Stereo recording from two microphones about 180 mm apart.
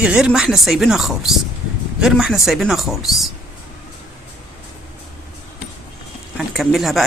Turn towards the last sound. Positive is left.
turn(degrees=0)  # may be behind; listen again after turning